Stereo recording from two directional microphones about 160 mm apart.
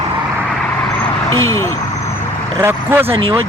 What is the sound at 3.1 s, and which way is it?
Speech, 30° right (ahead or behind).